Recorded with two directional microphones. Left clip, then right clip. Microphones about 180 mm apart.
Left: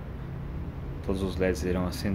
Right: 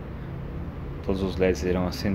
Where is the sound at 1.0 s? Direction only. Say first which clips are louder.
Right 4 dB; centre (ahead or behind).